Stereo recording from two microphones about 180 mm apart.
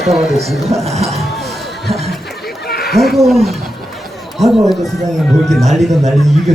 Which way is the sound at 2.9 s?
Centre (ahead or behind).